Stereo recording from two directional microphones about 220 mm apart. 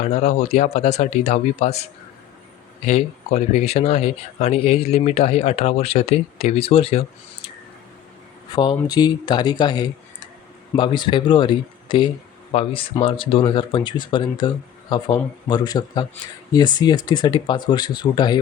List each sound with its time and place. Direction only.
0.0 s speech: 30° left (ahead or behind)
2.8 s speech: 30° left (ahead or behind)
8.5 s speech: 20° left (ahead or behind)